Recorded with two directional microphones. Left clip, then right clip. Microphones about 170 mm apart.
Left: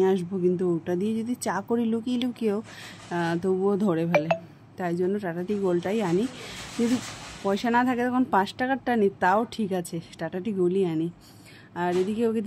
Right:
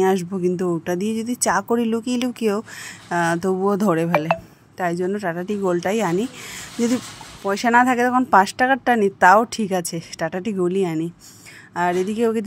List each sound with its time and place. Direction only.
0.0 s a woman's voice: 35° right (ahead or behind)
7.4 s a woman's voice: 35° right (ahead or behind)